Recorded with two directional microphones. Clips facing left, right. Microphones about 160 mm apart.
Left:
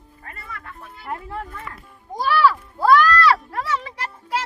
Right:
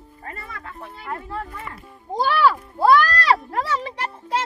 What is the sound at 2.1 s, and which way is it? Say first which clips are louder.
A child's voice: even; 25° right (ahead or behind).